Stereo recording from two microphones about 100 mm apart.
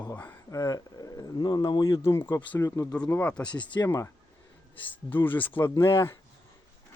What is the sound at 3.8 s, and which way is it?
Speech, 30° left (ahead or behind).